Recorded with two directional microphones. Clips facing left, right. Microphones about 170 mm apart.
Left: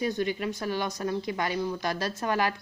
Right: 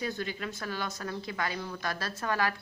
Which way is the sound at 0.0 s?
20° left (ahead or behind).